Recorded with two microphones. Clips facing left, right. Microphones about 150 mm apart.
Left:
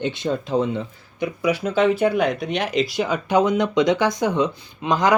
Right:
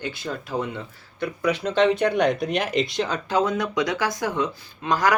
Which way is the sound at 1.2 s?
10° left (ahead or behind).